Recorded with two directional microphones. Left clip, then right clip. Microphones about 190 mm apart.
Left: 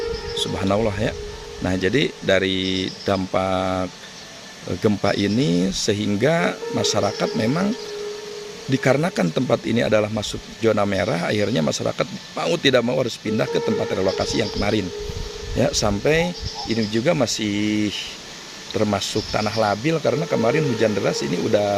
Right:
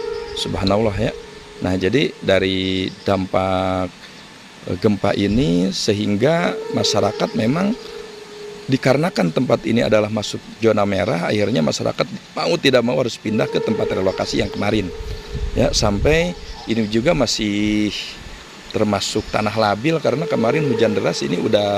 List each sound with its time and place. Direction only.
0.3 s speech: 20° right (ahead or behind)
8.7 s speech: 20° right (ahead or behind)